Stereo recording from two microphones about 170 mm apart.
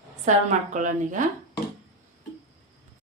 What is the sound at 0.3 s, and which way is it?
A woman's voice, 50° right (ahead or behind).